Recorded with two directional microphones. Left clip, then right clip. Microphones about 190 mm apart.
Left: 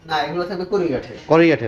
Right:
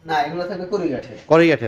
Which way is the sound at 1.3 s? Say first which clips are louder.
Even; 20° right (ahead or behind).